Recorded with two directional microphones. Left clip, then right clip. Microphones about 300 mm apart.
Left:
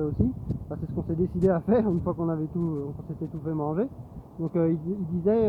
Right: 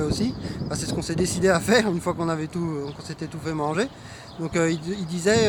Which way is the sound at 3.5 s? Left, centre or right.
Centre.